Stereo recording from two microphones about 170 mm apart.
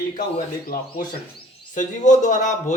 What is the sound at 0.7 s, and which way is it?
Speech, 55° left (ahead or behind).